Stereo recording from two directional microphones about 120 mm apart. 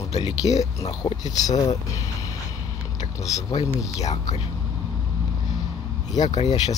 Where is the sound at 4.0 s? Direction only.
70° left (ahead or behind).